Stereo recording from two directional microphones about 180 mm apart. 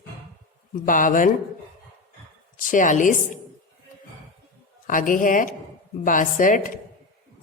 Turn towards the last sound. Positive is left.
turn(degrees=50)  # may be behind; listen again after turning